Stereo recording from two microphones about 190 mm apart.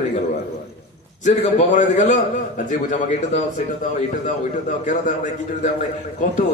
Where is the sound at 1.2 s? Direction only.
40° left (ahead or behind).